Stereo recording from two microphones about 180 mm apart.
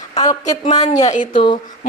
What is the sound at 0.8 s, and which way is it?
Speech, 40° left (ahead or behind).